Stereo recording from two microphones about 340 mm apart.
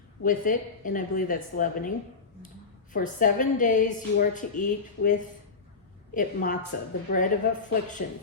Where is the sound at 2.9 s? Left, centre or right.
Left.